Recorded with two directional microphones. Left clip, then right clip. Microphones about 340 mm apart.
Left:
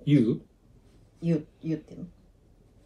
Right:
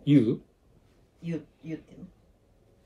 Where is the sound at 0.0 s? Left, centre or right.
Right.